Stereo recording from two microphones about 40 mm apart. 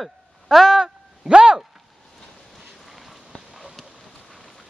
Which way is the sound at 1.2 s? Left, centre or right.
Right.